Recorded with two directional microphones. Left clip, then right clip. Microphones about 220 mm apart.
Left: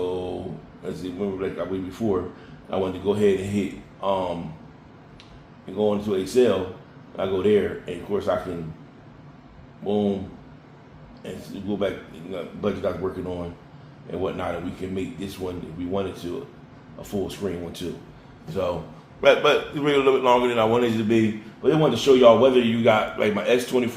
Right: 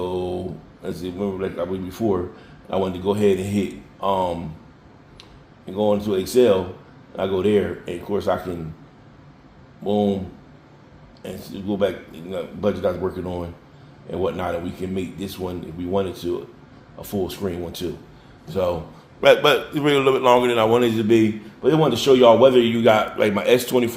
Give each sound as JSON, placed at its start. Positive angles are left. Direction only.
{"t": 0.9, "sound": "a man's voice", "side_deg": -45}
{"t": 5.6, "sound": "a man's voice", "side_deg": -45}
{"t": 9.8, "sound": "a man's voice", "side_deg": -45}
{"t": 11.2, "sound": "a man's voice", "side_deg": -45}
{"t": 19.2, "sound": "a man's voice", "side_deg": -45}